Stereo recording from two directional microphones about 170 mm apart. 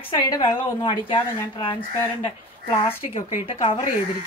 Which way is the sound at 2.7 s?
45° left (ahead or behind).